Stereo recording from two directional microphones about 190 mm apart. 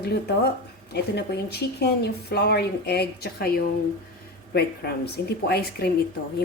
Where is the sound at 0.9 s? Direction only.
60° left (ahead or behind).